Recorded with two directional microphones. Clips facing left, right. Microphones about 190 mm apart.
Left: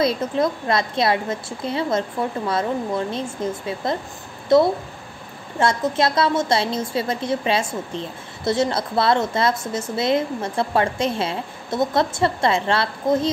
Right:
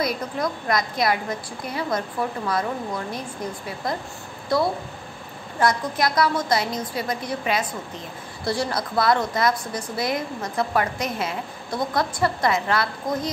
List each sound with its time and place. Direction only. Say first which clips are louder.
0.0 s a woman's voice: left 5 dB; 25° left (ahead or behind)